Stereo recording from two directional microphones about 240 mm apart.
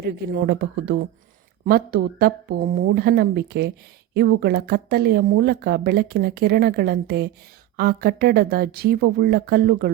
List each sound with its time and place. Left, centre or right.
0.4 s speech: right